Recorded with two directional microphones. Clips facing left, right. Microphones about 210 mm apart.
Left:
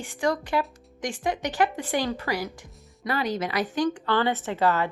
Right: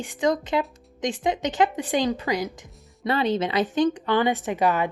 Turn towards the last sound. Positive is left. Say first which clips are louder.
# right 1 dB
turn(degrees=-15)  # may be behind; listen again after turning